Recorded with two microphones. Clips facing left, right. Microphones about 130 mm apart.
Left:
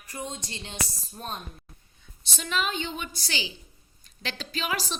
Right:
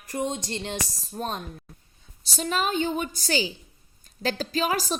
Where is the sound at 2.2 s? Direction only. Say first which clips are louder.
Right 3 dB; 35° right (ahead or behind).